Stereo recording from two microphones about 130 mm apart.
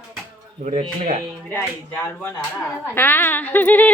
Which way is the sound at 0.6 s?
65° right (ahead or behind).